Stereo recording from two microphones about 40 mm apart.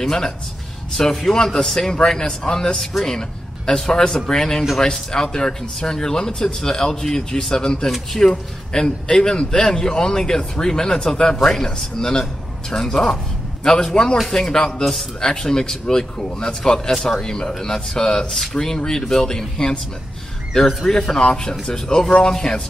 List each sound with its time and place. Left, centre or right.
0.9 s a man's voice: centre
2.9 s speech: centre
3.2 s a man's voice: centre